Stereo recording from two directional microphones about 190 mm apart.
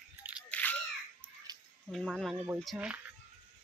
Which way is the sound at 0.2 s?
10° right (ahead or behind).